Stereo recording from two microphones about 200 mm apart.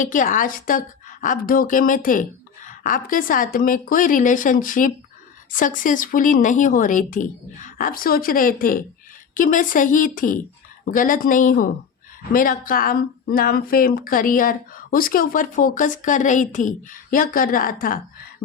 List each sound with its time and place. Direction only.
0.0 s speech: 40° left (ahead or behind)